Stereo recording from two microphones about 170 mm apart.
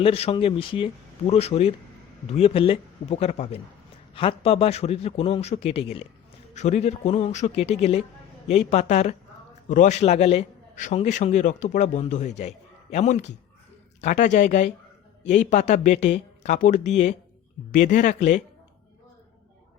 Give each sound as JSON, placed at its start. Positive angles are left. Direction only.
{"t": 0.0, "sound": "a man's voice", "side_deg": 35}